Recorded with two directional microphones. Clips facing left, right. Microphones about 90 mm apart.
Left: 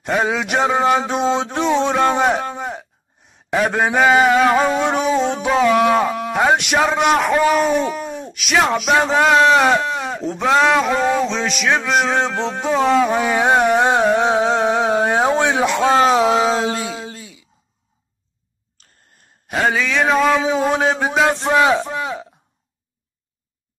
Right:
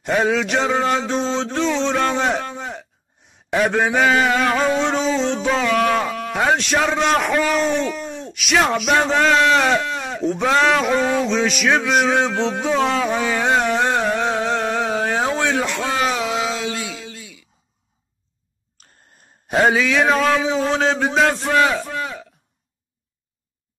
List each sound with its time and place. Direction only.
0.0 s speech: 5° left (ahead or behind)
2.6 s a sound: 10° left (ahead or behind)
3.4 s speech: centre (ahead or behind); by 10.0 s 20° left (ahead or behind)
10.0 s a sound: 5° left (ahead or behind)
10.5 s speech: 5° left (ahead or behind); by 16.0 s 20° left (ahead or behind)
16.0 s a sound: 30° left (ahead or behind)
19.7 s speech: centre (ahead or behind)
20.5 s speech: 15° left (ahead or behind)
21.3 s a man's voice: 20° left (ahead or behind)